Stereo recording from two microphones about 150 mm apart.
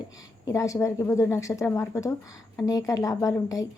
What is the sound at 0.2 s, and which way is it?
Speech, 25° left (ahead or behind).